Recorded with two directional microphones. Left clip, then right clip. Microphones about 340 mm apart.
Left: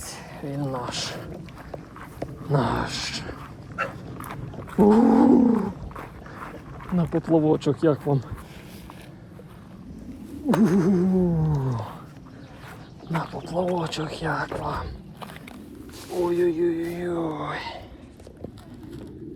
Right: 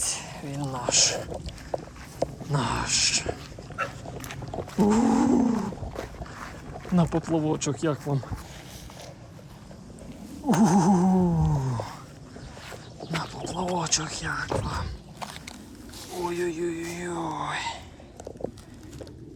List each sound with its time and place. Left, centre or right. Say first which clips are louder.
0.0 s speech: right 3 dB; centre
2.5 s speech: left 5 dB; centre
3.8 s roaring cats: left 2 dB; centre
6.9 s speech: right 1 dB; centre
7.2 s speech: left 6 dB; centre
10.6 s a sound: right 1 dB; centre
13.1 s a sound: left 2 dB; centre
14.6 s dog: left 4 dB; centre
16.2 s speech: left 6 dB; centre